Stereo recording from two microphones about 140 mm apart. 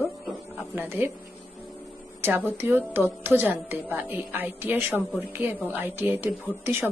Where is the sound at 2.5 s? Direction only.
15° right (ahead or behind).